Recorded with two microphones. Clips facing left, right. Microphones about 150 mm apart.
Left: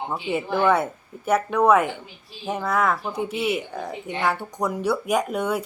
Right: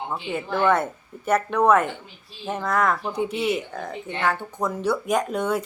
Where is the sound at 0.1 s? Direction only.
10° left (ahead or behind).